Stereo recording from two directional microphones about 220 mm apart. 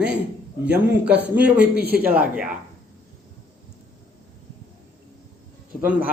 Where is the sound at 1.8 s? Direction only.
45° right (ahead or behind).